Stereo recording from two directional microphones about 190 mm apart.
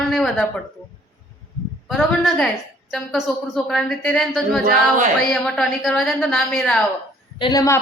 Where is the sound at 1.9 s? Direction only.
Centre (ahead or behind).